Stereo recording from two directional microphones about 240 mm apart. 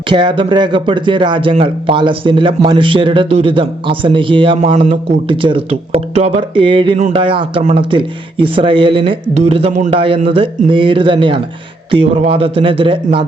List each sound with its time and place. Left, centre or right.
0.1 s speech: centre